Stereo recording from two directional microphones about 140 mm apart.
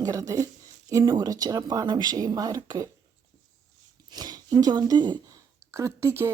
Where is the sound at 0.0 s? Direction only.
25° right (ahead or behind).